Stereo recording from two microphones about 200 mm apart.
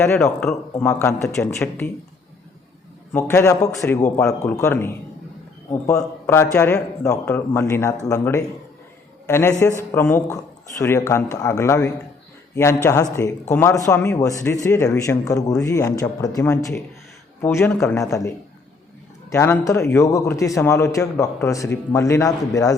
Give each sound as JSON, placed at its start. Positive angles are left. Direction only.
{"t": 0.0, "sound": "a man's voice", "side_deg": 10}
{"t": 3.1, "sound": "a man's voice", "side_deg": 10}
{"t": 6.2, "sound": "a man's voice", "side_deg": 15}
{"t": 19.3, "sound": "a man's voice", "side_deg": 15}